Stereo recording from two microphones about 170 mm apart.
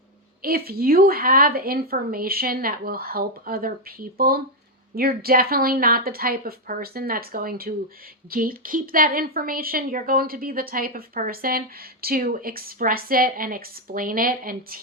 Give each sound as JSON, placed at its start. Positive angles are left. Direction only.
{"t": 0.4, "sound": "a woman's voice", "side_deg": -60}